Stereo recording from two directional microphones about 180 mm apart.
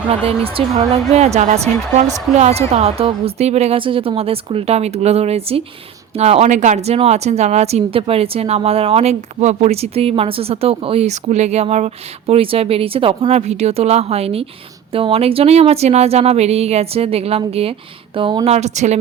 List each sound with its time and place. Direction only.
0.1 s speech: 35° right (ahead or behind)